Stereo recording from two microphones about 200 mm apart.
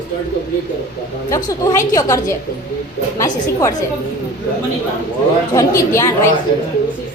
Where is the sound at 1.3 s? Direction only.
20° left (ahead or behind).